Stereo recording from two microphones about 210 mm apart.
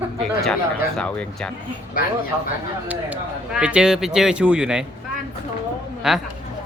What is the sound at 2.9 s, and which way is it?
Speech, 5° right (ahead or behind).